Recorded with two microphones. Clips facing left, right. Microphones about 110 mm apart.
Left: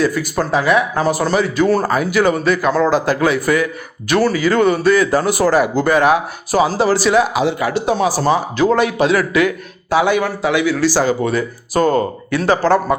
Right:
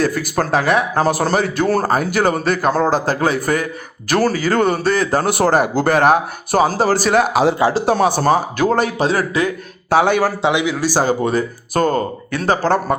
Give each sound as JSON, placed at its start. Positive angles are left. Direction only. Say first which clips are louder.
{"t": 0.0, "sound": "a man's voice", "louder": "left 1 dB", "side_deg": -50}
{"t": 5.2, "sound": "speech", "louder": "left 1 dB", "side_deg": -55}
{"t": 9.9, "sound": "speech", "louder": "right 1 dB", "side_deg": -50}
{"t": 10.4, "sound": "speech", "louder": "left 2 dB", "side_deg": -20}
{"t": 11.0, "sound": "a man's voice", "louder": "even", "side_deg": -40}